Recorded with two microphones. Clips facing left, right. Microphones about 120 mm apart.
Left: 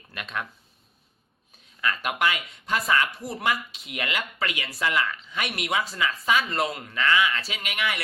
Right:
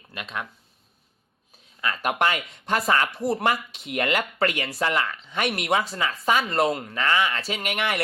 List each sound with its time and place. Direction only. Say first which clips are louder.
0.1 s speech: even; 20° right (ahead or behind)
2.0 s speech: right 5 dB; 40° right (ahead or behind)
5.8 s speech: right 2 dB; 30° right (ahead or behind); by 8.0 s 50° right (ahead or behind)